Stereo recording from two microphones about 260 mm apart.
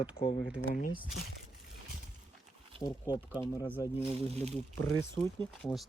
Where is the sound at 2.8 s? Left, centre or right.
Centre.